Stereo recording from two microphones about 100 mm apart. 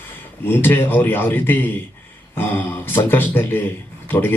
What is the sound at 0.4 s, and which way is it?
A man's voice, 20° left (ahead or behind).